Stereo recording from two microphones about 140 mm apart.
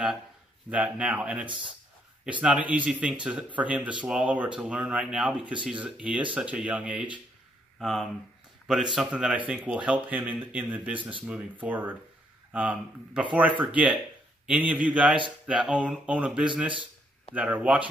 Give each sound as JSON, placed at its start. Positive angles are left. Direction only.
{"t": 0.7, "sound": "speech", "side_deg": -10}
{"t": 11.0, "sound": "speech", "side_deg": -35}
{"t": 11.6, "sound": "speech", "side_deg": -10}